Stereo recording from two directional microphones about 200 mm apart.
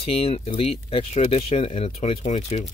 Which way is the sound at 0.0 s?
30° left (ahead or behind).